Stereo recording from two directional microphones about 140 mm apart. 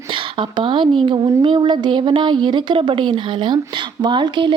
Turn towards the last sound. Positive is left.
turn(degrees=-35)  # may be behind; listen again after turning